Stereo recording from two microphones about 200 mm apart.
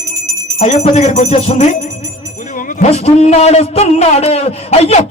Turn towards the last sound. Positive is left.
turn(degrees=30)  # may be behind; listen again after turning